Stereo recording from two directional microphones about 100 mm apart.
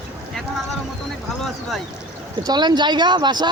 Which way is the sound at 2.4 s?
40° right (ahead or behind).